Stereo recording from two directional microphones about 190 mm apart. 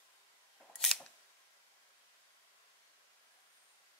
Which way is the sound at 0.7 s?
5° left (ahead or behind).